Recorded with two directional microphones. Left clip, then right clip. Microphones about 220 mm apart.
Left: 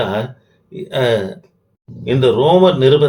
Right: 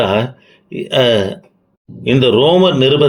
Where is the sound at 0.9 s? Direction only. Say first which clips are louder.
Right 4 dB; 30° right (ahead or behind).